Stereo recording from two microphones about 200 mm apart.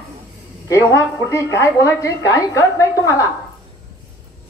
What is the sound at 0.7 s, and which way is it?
A woman's voice, 15° left (ahead or behind).